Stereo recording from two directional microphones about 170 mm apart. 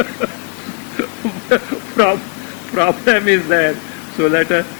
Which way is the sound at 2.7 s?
15° left (ahead or behind).